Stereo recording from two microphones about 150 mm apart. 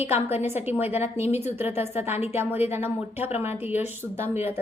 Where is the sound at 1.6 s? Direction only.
15° right (ahead or behind).